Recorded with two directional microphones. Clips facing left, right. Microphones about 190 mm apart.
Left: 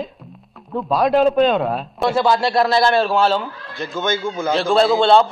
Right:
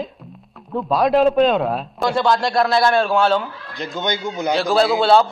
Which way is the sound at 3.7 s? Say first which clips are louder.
Left 2 dB; 20° right (ahead or behind).